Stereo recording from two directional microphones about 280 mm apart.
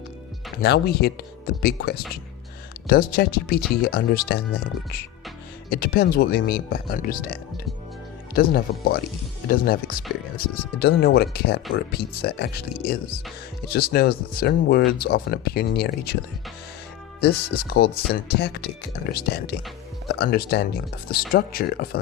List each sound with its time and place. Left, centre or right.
0.6 s speech: left
17.2 s speech: left